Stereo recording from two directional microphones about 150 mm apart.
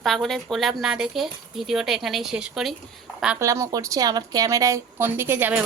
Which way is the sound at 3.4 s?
20° right (ahead or behind).